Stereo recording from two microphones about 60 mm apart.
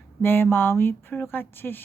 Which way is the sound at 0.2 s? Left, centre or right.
Left.